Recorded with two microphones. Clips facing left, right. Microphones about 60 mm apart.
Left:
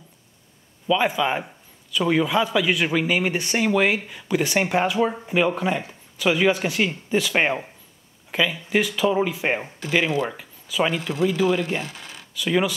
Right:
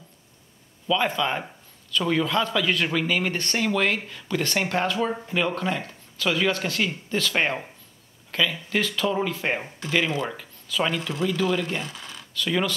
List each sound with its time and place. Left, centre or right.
0.8 s a man's voice: centre
11.0 s a man's voice: left